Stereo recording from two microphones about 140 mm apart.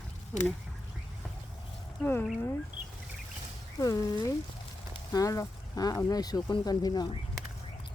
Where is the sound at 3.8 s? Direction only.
25° left (ahead or behind).